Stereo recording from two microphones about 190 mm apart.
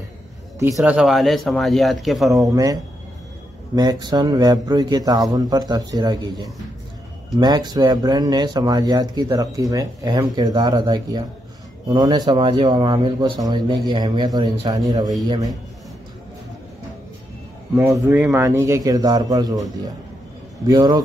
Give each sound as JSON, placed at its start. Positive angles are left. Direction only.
{"t": 0.7, "sound": "speech", "side_deg": -5}
{"t": 2.3, "sound": "speech", "side_deg": -20}
{"t": 17.7, "sound": "a man's voice", "side_deg": -15}